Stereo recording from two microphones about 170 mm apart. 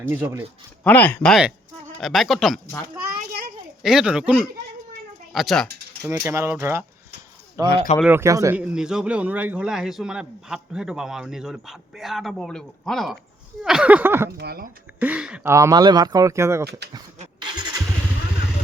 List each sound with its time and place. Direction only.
0.0 s speech: 10° right (ahead or behind)
0.9 s a man's voice: 10° left (ahead or behind)
3.8 s a man's voice: 5° right (ahead or behind)
5.3 s mechanisms: centre (ahead or behind)
6.1 s speech: 15° right (ahead or behind)
8.5 s a man's voice: 5° right (ahead or behind)
14.3 s speech: 65° right (ahead or behind)
14.9 s speech: 10° right (ahead or behind)
15.5 s speech: 20° right (ahead or behind)
17.4 s vehicle: 25° right (ahead or behind)